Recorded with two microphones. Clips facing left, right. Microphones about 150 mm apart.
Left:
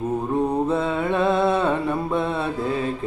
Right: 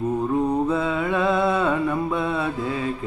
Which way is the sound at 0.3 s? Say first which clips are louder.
Left 1 dB; 25° left (ahead or behind).